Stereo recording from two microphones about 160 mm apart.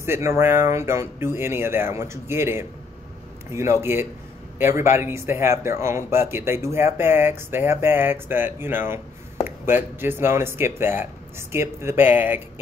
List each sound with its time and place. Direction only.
0.0 s speech: 15° right (ahead or behind)
3.8 s speech: 15° right (ahead or behind)